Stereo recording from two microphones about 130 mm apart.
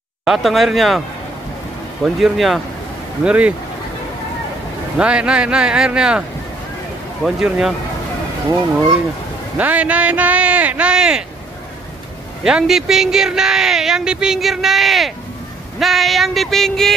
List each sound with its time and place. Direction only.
0.2 s speech: centre (ahead or behind)
2.0 s speech: 5° right (ahead or behind)
4.9 s speech: 10° right (ahead or behind)
7.2 s speech: 5° right (ahead or behind)
9.6 s speech: 10° right (ahead or behind)
12.4 s speech: 5° right (ahead or behind)